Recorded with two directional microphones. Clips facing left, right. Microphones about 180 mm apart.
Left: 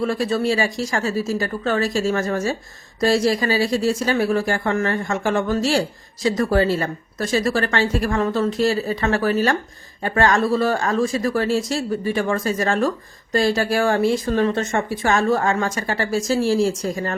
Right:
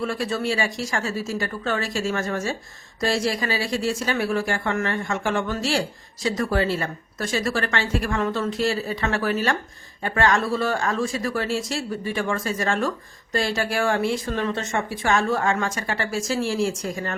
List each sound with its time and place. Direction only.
0.0 s speech: 40° left (ahead or behind)